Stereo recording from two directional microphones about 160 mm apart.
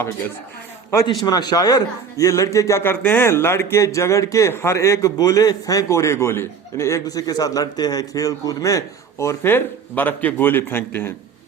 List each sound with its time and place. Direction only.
0.9 s a man's voice: 20° left (ahead or behind)